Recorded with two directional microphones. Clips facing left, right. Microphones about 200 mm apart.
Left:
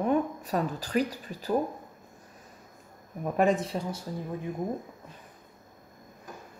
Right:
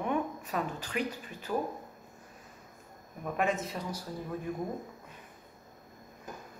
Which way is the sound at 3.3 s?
35° left (ahead or behind).